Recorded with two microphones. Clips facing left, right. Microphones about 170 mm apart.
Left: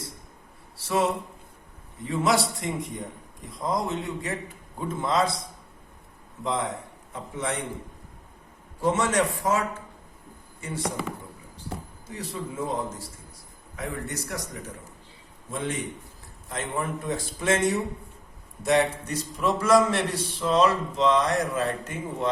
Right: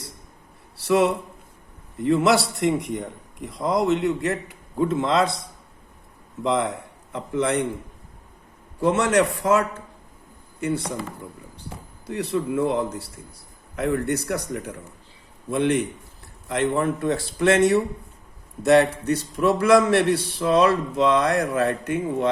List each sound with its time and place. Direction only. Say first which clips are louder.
0.8 s a man's voice: right 6 dB; 70° right (ahead or behind)
6.4 s a man's voice: right 6 dB; 70° right (ahead or behind)
8.8 s a man's voice: right 4 dB; 65° right (ahead or behind)
12.0 s a man's voice: right 10 dB; 65° right (ahead or behind)